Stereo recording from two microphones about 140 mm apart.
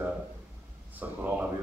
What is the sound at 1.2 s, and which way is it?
Speech, 15° right (ahead or behind).